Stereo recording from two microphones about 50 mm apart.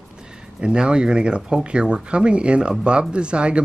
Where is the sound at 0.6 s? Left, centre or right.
Centre.